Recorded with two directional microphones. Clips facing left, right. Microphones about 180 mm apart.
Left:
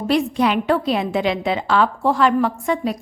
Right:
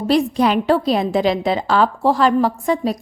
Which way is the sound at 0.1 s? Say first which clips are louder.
Right 2 dB; 35° right (ahead or behind).